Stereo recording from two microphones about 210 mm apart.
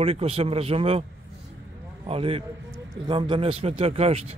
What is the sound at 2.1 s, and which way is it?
A man's voice, 25° right (ahead or behind).